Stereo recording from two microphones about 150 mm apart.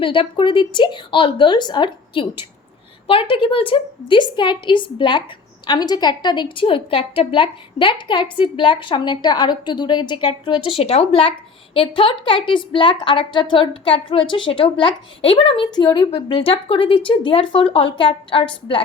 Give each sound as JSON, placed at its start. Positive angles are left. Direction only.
{"t": 0.0, "sound": "a woman's voice", "side_deg": 35}